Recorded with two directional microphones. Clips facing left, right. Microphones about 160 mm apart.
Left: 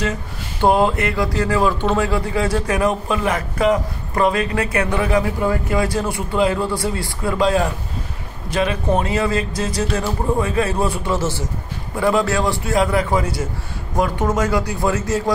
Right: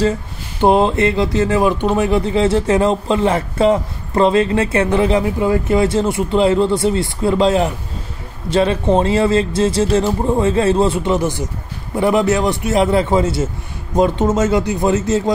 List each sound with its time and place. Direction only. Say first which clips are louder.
0.0 s speech: right 6 dB; 25° right (ahead or behind)